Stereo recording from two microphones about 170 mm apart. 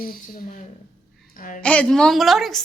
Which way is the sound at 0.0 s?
55° left (ahead or behind).